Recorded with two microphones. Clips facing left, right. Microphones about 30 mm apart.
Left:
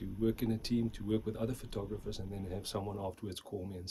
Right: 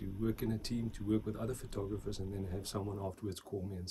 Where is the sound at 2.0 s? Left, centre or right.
Centre.